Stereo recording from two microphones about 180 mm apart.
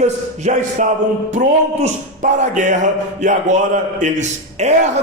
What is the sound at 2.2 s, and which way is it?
A man's voice, 45° right (ahead or behind).